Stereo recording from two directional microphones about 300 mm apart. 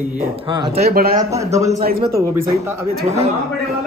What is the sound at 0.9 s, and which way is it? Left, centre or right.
Speech, right.